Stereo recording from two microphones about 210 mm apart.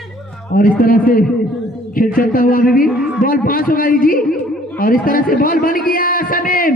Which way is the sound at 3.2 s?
40° left (ahead or behind).